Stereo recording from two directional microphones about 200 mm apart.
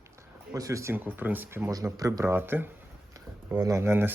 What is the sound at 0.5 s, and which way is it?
Speech, 15° right (ahead or behind).